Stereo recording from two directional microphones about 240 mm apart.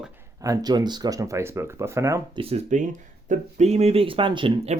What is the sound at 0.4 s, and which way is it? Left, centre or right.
Speech, centre.